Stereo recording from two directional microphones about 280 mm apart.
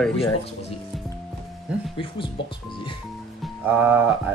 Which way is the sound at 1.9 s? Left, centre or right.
Centre.